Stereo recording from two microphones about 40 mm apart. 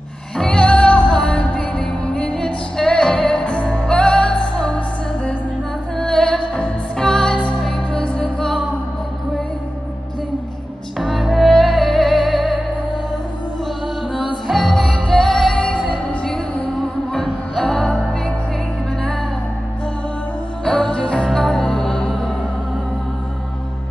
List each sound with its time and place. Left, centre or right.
0.5 s music: left
2.3 s music: centre
3.4 s music: left
5.9 s music: centre
7.0 s music: centre
8.0 s music: left
8.4 s music: centre
11.0 s music: centre
14.1 s music: centre
15.5 s music: left
16.6 s music: centre
20.6 s music: centre